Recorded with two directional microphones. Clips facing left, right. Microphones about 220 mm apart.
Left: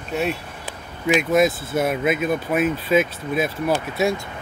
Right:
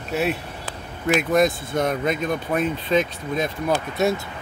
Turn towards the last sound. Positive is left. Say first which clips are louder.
# even
turn(degrees=0)  # may be behind; listen again after turning